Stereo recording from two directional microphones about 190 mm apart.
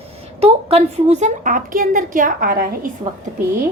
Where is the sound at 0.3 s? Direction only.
30° right (ahead or behind); by 2.9 s 50° right (ahead or behind).